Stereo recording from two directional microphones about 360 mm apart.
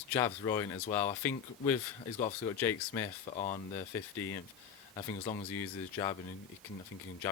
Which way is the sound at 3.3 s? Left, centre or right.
Centre.